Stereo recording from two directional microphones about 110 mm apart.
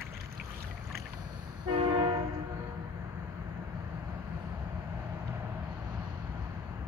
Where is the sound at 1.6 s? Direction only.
45° right (ahead or behind).